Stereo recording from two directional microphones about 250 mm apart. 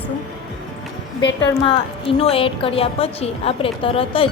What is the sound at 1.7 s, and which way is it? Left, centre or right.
A woman's voice, left.